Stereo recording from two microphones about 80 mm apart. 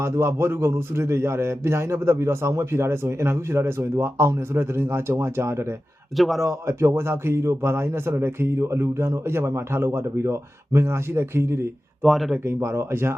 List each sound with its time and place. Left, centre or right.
0.0 s a man's voice: right
6.1 s speech: centre
6.4 s a man's voice: right
12.0 s speech: centre
12.5 s speech: right